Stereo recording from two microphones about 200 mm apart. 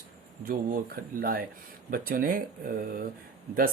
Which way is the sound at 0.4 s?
45° right (ahead or behind).